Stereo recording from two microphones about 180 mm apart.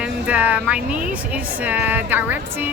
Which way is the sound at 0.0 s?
5° right (ahead or behind).